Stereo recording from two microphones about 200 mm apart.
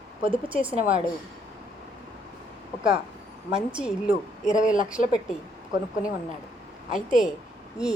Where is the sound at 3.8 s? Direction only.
5° right (ahead or behind).